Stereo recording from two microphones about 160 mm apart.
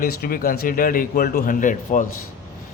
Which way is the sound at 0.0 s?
65° left (ahead or behind).